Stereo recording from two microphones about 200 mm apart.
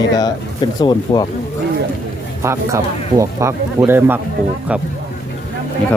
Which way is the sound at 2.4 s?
15° right (ahead or behind).